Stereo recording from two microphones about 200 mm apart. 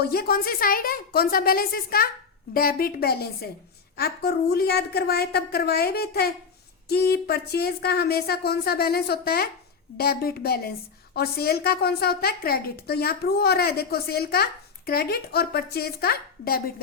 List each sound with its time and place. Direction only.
0.0 s a woman's voice: 50° left (ahead or behind)